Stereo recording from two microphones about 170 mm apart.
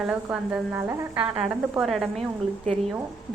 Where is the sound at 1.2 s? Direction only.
35° right (ahead or behind).